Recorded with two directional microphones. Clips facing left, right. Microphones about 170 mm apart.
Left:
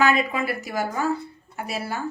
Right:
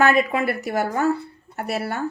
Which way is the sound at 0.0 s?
60° right (ahead or behind).